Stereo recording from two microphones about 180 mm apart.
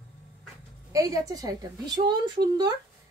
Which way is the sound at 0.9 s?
20° right (ahead or behind).